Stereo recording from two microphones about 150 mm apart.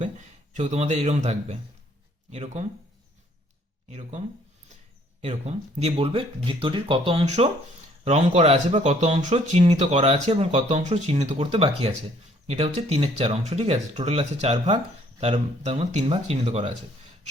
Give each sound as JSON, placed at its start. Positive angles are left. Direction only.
{"t": 0.0, "sound": "speech", "side_deg": -50}
{"t": 3.8, "sound": "speech", "side_deg": -45}
{"t": 5.2, "sound": "speech", "side_deg": -45}